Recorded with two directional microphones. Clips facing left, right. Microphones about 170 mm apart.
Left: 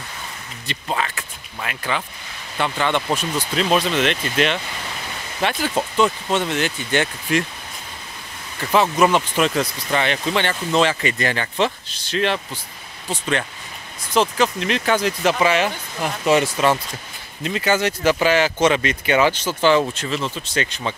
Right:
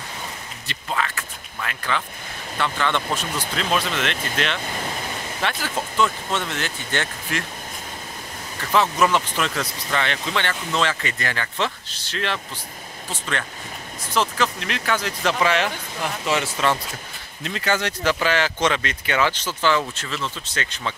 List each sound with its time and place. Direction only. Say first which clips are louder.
0.7 s speech: left 2 dB; 20° left (ahead or behind)
8.7 s speech: left 3 dB; 20° left (ahead or behind)
14.1 s speech: left 4 dB; 15° left (ahead or behind)